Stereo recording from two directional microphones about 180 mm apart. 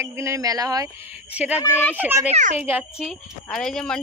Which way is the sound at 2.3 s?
40° right (ahead or behind).